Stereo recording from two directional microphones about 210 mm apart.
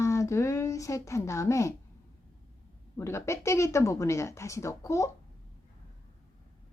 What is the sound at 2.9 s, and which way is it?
Speech, 15° left (ahead or behind).